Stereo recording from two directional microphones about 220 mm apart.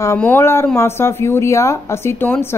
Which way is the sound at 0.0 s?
10° left (ahead or behind).